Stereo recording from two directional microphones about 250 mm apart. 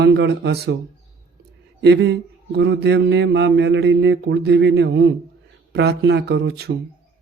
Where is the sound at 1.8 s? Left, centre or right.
Right.